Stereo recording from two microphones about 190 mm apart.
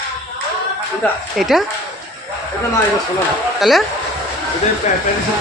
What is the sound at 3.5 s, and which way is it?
Speech, centre (ahead or behind).